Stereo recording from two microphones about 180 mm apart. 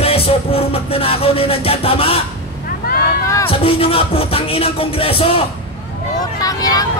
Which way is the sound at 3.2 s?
15° left (ahead or behind).